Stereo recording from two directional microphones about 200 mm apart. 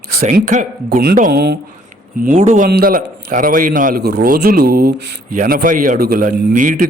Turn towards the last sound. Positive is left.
turn(degrees=-40)  # may be behind; listen again after turning